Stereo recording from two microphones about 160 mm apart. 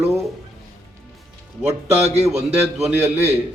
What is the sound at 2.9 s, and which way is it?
Speech, 10° right (ahead or behind).